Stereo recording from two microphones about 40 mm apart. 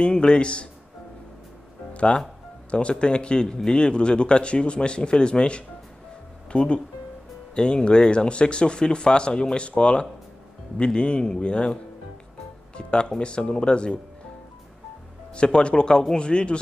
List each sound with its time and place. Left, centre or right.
0.0 s speech: left
2.7 s speech: left
15.3 s speech: left
16.2 s speech: left